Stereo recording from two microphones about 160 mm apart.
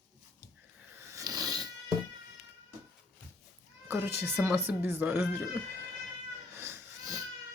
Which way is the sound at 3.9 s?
15° right (ahead or behind).